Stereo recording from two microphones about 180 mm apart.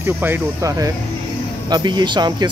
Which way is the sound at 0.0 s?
10° right (ahead or behind).